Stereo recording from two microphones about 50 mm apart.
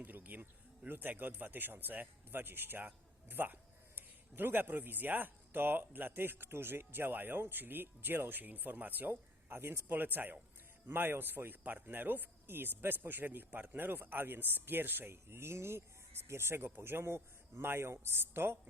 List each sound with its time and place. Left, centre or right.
0.0 s speech: right
9.9 s speech: right